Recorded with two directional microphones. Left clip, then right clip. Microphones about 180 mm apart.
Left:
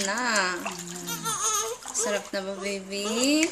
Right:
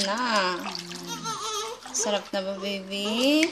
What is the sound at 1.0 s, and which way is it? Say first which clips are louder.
Music: left 4 dB; 20° left (ahead or behind).